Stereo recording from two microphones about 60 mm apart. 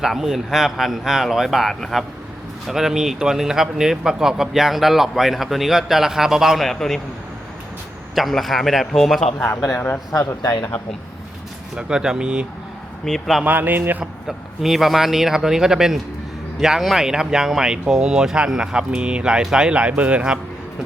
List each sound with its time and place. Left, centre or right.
0.0 s speech: centre
6.7 s speech: centre
8.1 s speech: centre
9.6 s speech: left
10.1 s speech: left
11.7 s speech: centre
13.1 s speech: centre
13.4 s speech: right
14.0 s speech: centre